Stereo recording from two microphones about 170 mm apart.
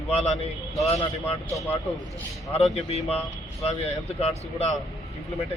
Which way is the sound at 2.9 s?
35° left (ahead or behind).